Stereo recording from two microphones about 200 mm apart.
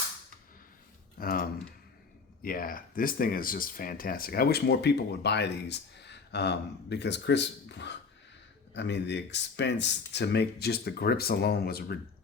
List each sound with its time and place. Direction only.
1.2 s typing: 45° left (ahead or behind)
2.4 s speech: 45° left (ahead or behind)